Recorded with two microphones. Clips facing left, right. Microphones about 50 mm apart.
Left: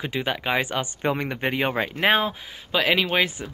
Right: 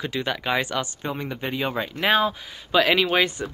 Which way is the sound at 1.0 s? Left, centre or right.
Left.